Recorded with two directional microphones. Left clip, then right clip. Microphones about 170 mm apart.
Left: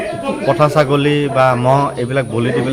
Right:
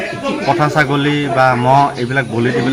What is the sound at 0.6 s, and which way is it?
Speech, 35° left (ahead or behind).